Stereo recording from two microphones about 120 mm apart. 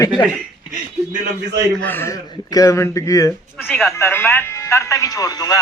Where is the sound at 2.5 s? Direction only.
25° left (ahead or behind).